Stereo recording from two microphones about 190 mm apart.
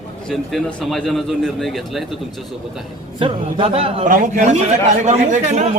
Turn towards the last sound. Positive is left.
turn(degrees=-35)  # may be behind; listen again after turning